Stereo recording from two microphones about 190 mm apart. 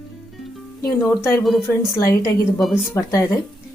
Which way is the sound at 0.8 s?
15° left (ahead or behind).